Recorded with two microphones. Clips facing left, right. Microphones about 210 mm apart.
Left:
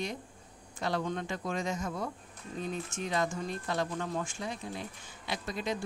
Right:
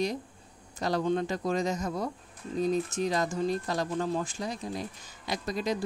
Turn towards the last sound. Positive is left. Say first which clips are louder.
# right 4 dB
turn(degrees=-40)  # may be behind; listen again after turning